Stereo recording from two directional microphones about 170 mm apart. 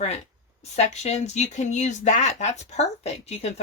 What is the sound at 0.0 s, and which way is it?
Speech, 45° left (ahead or behind).